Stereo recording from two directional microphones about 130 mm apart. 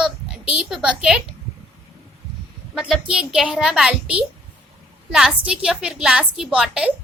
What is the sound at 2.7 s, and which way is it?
A woman's voice, 5° right (ahead or behind).